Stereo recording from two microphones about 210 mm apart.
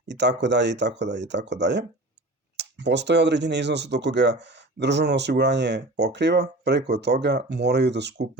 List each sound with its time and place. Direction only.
0.1 s speech: 55° right (ahead or behind)